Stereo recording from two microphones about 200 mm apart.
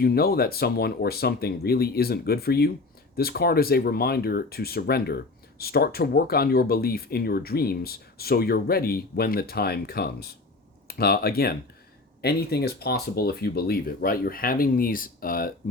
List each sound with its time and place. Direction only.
0.0 s speech: 50° left (ahead or behind)